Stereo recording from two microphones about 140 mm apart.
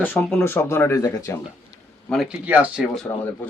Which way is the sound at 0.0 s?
15° left (ahead or behind).